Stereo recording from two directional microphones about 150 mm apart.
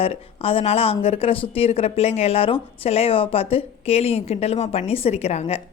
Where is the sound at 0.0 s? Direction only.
40° left (ahead or behind).